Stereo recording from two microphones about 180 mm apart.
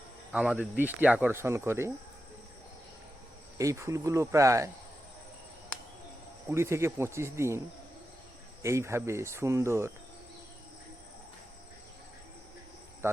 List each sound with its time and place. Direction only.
0.3 s speech: 5° right (ahead or behind)
3.6 s speech: 15° right (ahead or behind)
6.5 s speech: 15° right (ahead or behind)
8.6 s speech: 15° right (ahead or behind)